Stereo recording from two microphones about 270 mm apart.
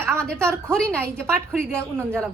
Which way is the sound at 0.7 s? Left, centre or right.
Centre.